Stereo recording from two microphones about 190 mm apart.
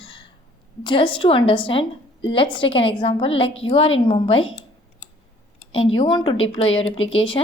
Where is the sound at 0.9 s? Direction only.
25° left (ahead or behind).